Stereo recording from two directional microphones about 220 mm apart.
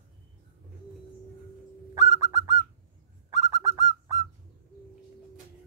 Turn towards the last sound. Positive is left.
turn(degrees=-15)  # may be behind; listen again after turning